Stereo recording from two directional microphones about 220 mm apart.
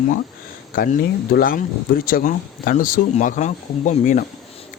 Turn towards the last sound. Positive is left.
turn(degrees=35)  # may be behind; listen again after turning